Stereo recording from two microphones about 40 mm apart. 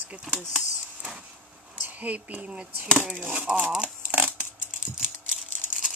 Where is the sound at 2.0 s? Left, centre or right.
Right.